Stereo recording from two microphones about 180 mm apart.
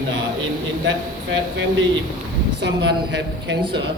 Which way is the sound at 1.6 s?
90° right.